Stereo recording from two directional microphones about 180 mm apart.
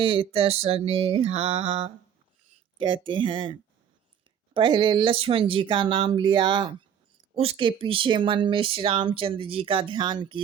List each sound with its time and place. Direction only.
0.0 s music: 30° right (ahead or behind)
2.7 s speech: 30° right (ahead or behind)